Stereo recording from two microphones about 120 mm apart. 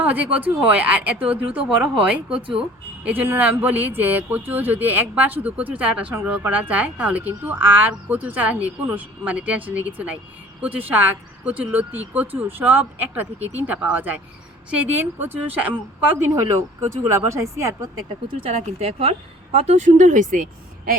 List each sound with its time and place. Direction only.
0.0 s speech: 15° right (ahead or behind)
16.3 s speech: 25° right (ahead or behind)
18.3 s speech: 55° right (ahead or behind); by 20.2 s 90° right